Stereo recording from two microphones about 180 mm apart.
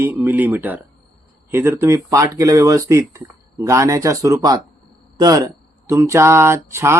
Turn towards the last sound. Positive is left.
turn(degrees=-15)  # may be behind; listen again after turning